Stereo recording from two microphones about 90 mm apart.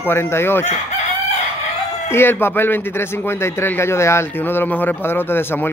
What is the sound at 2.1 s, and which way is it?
Speech, 25° left (ahead or behind).